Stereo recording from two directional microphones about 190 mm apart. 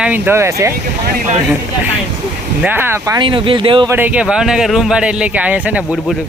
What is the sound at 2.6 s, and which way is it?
Speech, 10° right (ahead or behind).